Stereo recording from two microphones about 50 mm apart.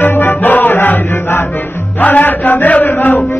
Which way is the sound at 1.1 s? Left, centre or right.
Left.